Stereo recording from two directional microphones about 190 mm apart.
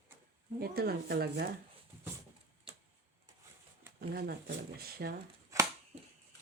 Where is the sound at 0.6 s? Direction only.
55° right (ahead or behind).